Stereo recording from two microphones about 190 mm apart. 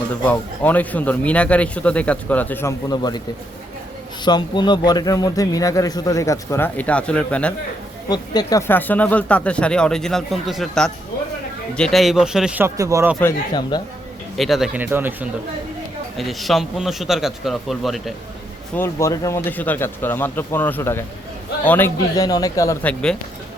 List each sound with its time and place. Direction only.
0.3 s speech: 10° left (ahead or behind)
4.2 s a man's voice: 25° left (ahead or behind); by 7.5 s 5° left (ahead or behind)
8.1 s a man's voice: 20° left (ahead or behind); by 13.1 s 15° right (ahead or behind)
13.5 s a man's voice: 20° left (ahead or behind)
14.3 s speech: centre (ahead or behind)
16.1 s a man's voice: centre (ahead or behind)
18.8 s speech: 15° left (ahead or behind)